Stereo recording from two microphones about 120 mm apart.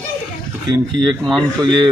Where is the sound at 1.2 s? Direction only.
Centre (ahead or behind).